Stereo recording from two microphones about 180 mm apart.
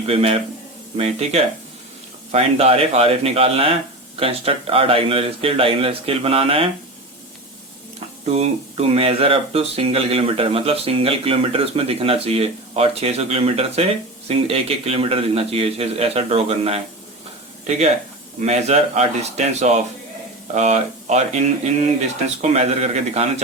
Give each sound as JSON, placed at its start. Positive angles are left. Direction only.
{"t": 0.1, "sound": "speech", "side_deg": -30}
{"t": 8.2, "sound": "speech", "side_deg": -35}